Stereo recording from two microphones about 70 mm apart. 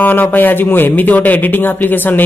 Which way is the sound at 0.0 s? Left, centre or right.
Left.